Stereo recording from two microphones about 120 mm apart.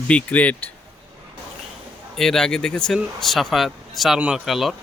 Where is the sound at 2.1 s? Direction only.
5° left (ahead or behind).